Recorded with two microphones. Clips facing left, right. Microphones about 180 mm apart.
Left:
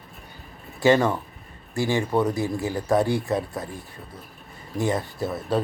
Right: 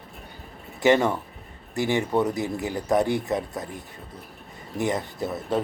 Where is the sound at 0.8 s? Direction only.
20° right (ahead or behind).